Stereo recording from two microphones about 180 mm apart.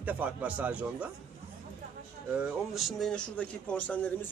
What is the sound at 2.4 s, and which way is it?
A man's voice, centre (ahead or behind).